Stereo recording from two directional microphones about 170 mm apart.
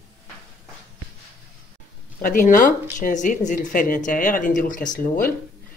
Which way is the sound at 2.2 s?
50° left (ahead or behind).